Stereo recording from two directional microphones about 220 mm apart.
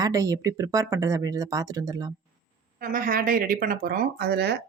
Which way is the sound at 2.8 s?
40° right (ahead or behind).